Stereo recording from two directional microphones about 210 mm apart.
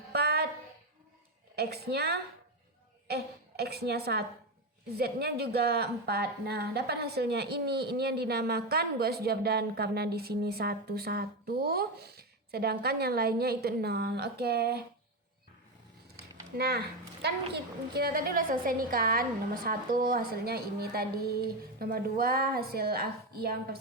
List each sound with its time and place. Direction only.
0.1 s a sound: 50° right (ahead or behind)
1.5 s a woman's voice: 50° right (ahead or behind)
16.6 s a woman's voice: 50° right (ahead or behind)